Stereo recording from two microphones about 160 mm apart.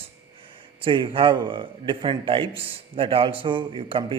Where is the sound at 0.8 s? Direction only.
30° right (ahead or behind).